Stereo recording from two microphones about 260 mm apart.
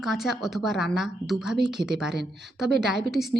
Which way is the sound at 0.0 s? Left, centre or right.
Centre.